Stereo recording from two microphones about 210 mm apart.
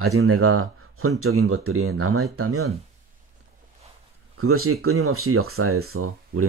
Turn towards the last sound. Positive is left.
turn(degrees=-80)